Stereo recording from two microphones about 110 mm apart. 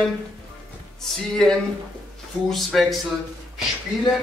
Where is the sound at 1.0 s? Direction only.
5° left (ahead or behind).